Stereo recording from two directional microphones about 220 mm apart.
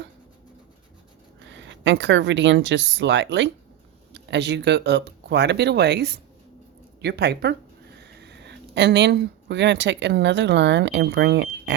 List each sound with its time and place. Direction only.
1.5 s speech: 55° right (ahead or behind)